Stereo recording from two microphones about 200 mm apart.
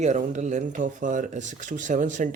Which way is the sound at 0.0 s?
35° right (ahead or behind).